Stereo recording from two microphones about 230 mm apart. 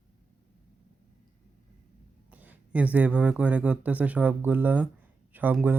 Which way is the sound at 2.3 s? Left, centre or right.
Centre.